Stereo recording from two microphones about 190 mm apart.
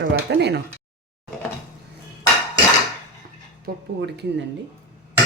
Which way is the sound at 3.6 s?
60° right (ahead or behind).